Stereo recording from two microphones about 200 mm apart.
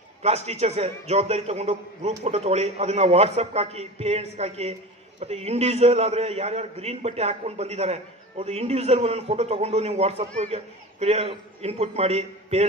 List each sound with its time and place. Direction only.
0.2 s a man's voice: 30° right (ahead or behind)